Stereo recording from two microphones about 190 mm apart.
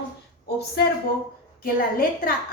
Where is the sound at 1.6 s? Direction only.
50° left (ahead or behind).